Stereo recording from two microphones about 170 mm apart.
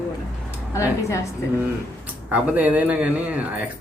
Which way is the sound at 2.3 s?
10° right (ahead or behind).